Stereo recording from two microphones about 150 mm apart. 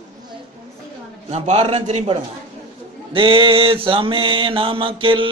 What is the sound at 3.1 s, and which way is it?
Mantra, 35° right (ahead or behind).